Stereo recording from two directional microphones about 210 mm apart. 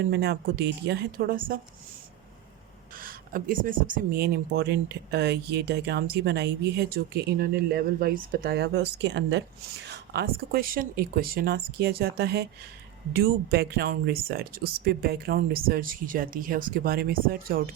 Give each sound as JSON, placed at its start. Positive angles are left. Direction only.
{"t": 0.0, "sound": "speech", "side_deg": -50}
{"t": 2.9, "sound": "speech", "side_deg": -40}